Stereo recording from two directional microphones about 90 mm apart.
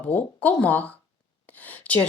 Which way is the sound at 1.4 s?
20° left (ahead or behind).